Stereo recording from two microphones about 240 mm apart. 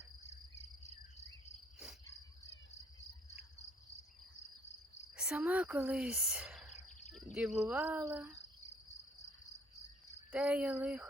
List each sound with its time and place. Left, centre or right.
0.8 s insect: left
5.1 s speech: centre
8.1 s cricket: centre
10.3 s speech: centre